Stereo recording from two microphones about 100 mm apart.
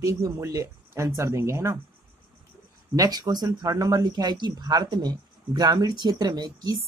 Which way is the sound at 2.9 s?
40° right (ahead or behind).